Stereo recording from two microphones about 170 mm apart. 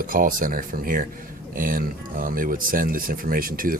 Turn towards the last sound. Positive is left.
turn(degrees=-55)  # may be behind; listen again after turning